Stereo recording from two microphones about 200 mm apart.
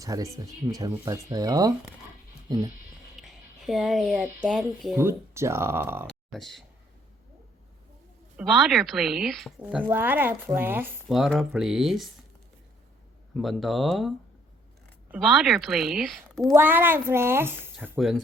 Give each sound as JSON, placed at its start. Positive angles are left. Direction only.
{"t": 0.0, "sound": "speech", "side_deg": -15}
{"t": 3.2, "sound": "music", "side_deg": 0}
{"t": 4.4, "sound": "a woman's voice", "side_deg": 0}
{"t": 4.9, "sound": "speech", "side_deg": -15}
{"t": 6.1, "sound": "a sound", "side_deg": 0}
{"t": 8.4, "sound": "a woman's voice", "side_deg": 0}
{"t": 13.3, "sound": "a woman's voice", "side_deg": 0}
{"t": 15.1, "sound": "a woman's voice", "side_deg": -5}
{"t": 16.6, "sound": "a woman's voice", "side_deg": -10}